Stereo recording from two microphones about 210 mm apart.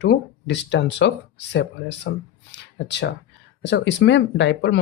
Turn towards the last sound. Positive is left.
turn(degrees=55)  # may be behind; listen again after turning